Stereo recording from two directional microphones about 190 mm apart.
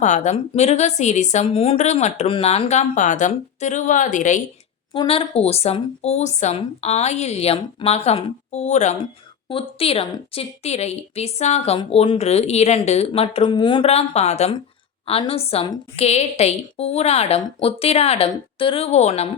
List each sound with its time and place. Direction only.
0.0 s a woman's voice: 40° left (ahead or behind)
4.9 s a woman's voice: 30° left (ahead or behind)